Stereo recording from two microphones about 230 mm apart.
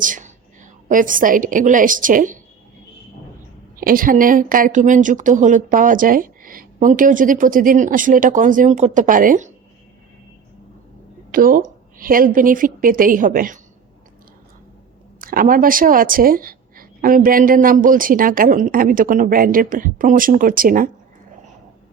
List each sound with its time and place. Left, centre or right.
0.0 s a woman's voice: right
3.8 s speech: right
11.3 s speech: right
15.2 s speech: right